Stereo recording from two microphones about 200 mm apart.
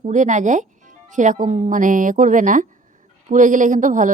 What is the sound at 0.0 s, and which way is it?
Speech, 40° right (ahead or behind).